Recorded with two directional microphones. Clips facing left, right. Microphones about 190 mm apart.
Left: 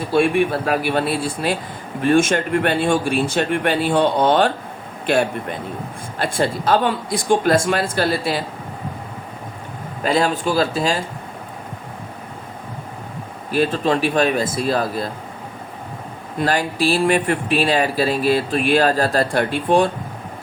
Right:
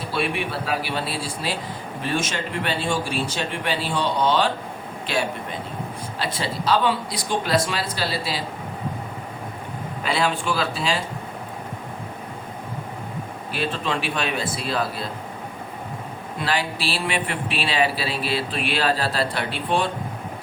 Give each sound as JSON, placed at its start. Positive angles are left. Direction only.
{"t": 0.1, "sound": "speech", "side_deg": 45}
{"t": 10.0, "sound": "speech", "side_deg": 40}
{"t": 13.5, "sound": "speech", "side_deg": 40}
{"t": 16.4, "sound": "speech", "side_deg": 45}